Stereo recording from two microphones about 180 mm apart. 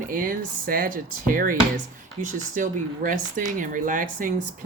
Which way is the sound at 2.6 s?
50° right (ahead or behind).